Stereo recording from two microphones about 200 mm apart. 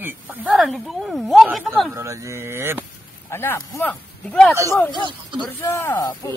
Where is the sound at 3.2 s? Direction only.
15° left (ahead or behind).